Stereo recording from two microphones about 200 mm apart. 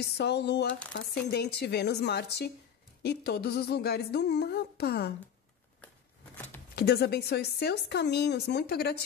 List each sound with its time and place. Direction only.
0.0 s a woman's voice: 55° left (ahead or behind)
6.3 s a sound: 10° left (ahead or behind)
6.7 s a woman's voice: 55° left (ahead or behind)